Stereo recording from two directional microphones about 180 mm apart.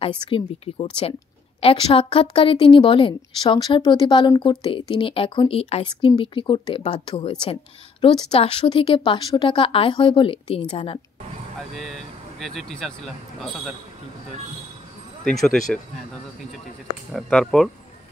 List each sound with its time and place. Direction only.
0.3 s a woman's voice: 30° left (ahead or behind)
11.7 s speech: centre (ahead or behind)
15.2 s speech: centre (ahead or behind)
17.1 s speech: 5° left (ahead or behind)